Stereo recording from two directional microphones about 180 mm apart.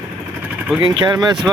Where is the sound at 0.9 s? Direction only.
25° right (ahead or behind).